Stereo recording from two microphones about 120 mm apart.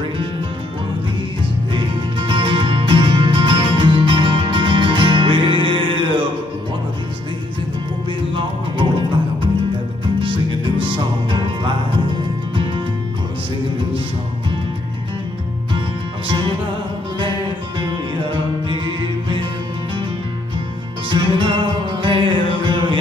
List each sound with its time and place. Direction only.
1.7 s music: 45° right (ahead or behind)
10.2 s music: 45° right (ahead or behind)
18.3 s music: 45° right (ahead or behind)
21.1 s music: 40° right (ahead or behind)